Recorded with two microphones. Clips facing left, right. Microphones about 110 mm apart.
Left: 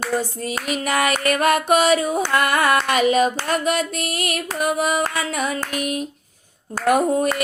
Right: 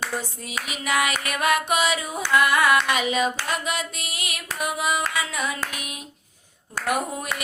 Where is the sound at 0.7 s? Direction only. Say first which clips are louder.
Left 4 dB; 45° left (ahead or behind).